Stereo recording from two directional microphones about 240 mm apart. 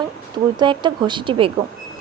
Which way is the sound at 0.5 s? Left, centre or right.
Centre.